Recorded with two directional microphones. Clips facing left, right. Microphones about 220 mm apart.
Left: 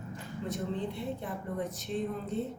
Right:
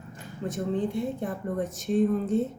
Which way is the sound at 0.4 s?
50° right (ahead or behind).